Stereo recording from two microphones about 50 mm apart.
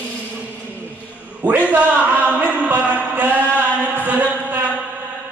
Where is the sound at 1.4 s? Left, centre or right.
Right.